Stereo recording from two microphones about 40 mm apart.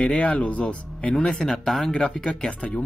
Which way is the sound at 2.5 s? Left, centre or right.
Left.